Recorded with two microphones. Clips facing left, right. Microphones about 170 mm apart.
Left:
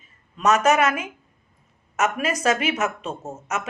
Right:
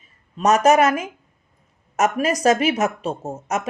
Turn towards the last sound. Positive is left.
turn(degrees=-35)  # may be behind; listen again after turning